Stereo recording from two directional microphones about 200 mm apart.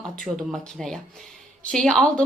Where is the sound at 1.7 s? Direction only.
Centre (ahead or behind).